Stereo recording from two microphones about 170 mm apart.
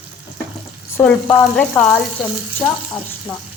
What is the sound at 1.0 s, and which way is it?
Speech, 10° left (ahead or behind).